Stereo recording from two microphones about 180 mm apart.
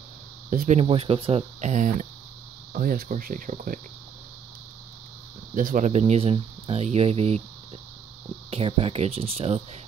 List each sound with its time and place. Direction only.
0.5 s speech: 45° right (ahead or behind)
5.5 s speech: 45° right (ahead or behind)
8.5 s speech: 30° right (ahead or behind)